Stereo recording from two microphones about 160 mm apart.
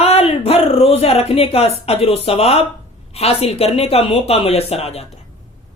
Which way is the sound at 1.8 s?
40° left (ahead or behind).